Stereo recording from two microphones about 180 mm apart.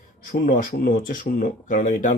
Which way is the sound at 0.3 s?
50° left (ahead or behind).